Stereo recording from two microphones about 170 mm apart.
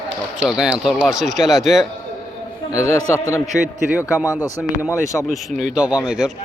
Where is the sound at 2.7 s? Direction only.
20° left (ahead or behind).